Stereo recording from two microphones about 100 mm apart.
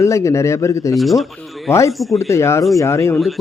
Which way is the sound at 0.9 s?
Centre (ahead or behind).